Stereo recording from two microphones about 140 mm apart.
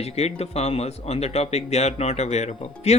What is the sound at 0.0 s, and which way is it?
Speech, 50° left (ahead or behind).